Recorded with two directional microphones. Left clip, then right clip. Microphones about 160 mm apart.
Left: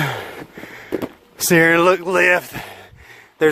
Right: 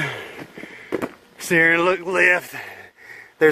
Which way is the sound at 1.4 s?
35° left (ahead or behind).